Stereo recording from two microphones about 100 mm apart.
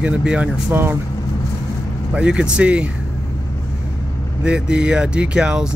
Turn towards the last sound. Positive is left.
turn(degrees=-10)  # may be behind; listen again after turning